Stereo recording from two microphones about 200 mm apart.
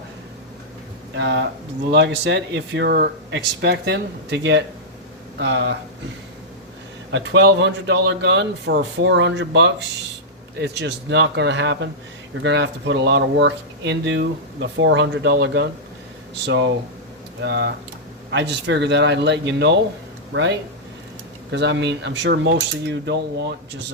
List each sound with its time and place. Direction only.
1.1 s speech: 60° right (ahead or behind)
7.1 s speech: 60° right (ahead or behind)
17.4 s speech: 60° right (ahead or behind)